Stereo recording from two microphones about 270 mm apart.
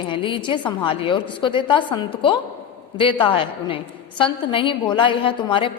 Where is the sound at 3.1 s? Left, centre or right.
Centre.